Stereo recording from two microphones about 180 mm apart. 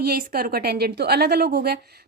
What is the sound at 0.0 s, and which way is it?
Speech, 55° right (ahead or behind).